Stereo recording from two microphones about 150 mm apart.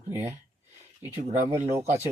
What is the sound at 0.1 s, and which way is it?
Speech, 15° right (ahead or behind).